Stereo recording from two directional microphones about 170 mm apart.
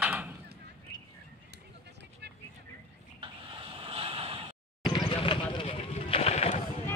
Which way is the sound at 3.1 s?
30° right (ahead or behind).